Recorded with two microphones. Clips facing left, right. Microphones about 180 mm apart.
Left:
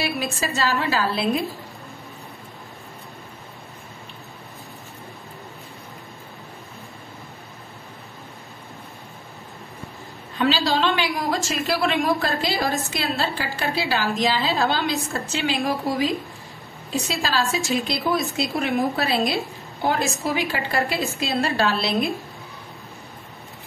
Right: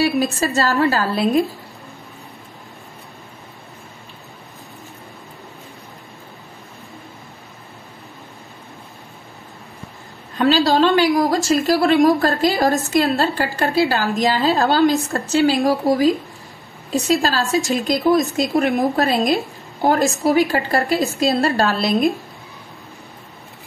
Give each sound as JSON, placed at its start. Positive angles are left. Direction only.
{"t": 0.0, "sound": "a woman's voice", "side_deg": -40}
{"t": 10.4, "sound": "a woman's voice", "side_deg": -40}